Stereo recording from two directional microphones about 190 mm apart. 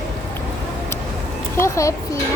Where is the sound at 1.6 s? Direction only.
15° left (ahead or behind).